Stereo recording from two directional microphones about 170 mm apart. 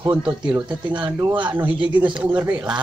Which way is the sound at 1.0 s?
30° right (ahead or behind).